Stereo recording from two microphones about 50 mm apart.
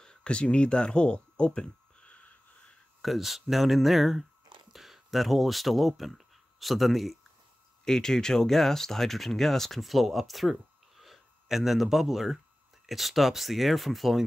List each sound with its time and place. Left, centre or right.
0.0 s a sound: centre
3.0 s speech: centre
7.8 s speech: centre